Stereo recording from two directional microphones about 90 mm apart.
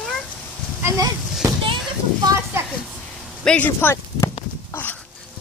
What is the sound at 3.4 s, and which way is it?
Speech, 10° left (ahead or behind).